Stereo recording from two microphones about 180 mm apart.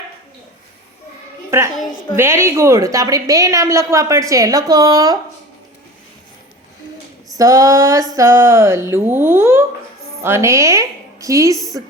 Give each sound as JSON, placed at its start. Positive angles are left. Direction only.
{"t": 1.5, "sound": "a woman's voice", "side_deg": -15}
{"t": 7.3, "sound": "a woman's voice", "side_deg": -20}